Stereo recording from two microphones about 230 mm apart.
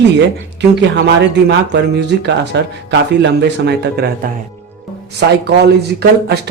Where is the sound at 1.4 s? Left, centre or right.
Right.